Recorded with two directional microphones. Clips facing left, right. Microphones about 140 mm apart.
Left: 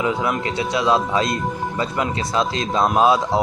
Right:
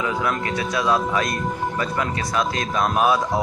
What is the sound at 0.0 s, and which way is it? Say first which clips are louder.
A man's voice: left 2 dB; 20° left (ahead or behind).